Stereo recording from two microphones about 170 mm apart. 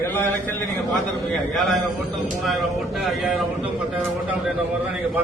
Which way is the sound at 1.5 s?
Centre (ahead or behind).